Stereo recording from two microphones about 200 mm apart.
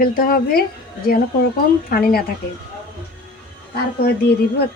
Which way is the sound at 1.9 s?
50° left (ahead or behind).